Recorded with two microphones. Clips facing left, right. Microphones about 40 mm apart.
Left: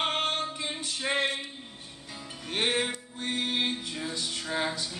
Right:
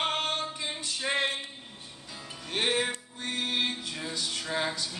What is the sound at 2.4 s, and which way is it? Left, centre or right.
Music, centre.